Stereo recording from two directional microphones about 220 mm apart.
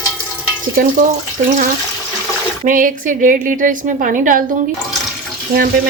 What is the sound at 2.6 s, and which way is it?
A woman's voice, 40° right (ahead or behind).